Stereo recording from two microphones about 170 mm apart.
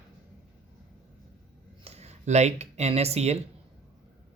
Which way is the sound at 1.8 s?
40° right (ahead or behind).